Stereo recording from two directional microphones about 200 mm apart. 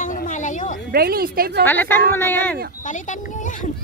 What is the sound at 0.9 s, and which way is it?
Speech, 50° right (ahead or behind).